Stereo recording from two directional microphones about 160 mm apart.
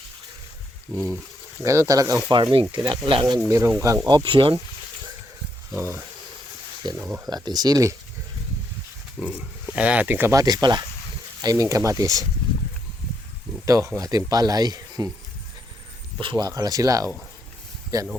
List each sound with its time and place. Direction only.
0.9 s speech: 10° left (ahead or behind)
1.6 s speech: 20° right (ahead or behind)
3.5 s speech: 15° right (ahead or behind)
5.7 s speech: 15° right (ahead or behind)
7.3 s speech: 25° right (ahead or behind)
9.2 s speech: 5° right (ahead or behind); by 12.2 s 20° right (ahead or behind)
13.7 s speech: 20° right (ahead or behind)
16.1 s speech: 30° right (ahead or behind)